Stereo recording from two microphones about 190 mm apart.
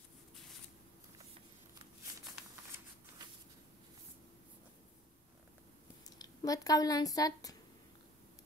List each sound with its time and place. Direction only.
6.0 s speech: 20° left (ahead or behind)